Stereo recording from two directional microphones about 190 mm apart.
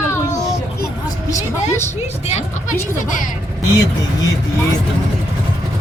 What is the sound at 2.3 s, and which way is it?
Vehicle, 35° left (ahead or behind).